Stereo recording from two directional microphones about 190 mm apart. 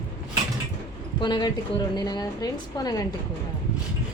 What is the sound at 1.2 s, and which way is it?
A woman's voice, 20° left (ahead or behind).